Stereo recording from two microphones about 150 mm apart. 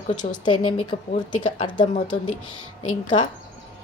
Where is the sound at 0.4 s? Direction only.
30° left (ahead or behind).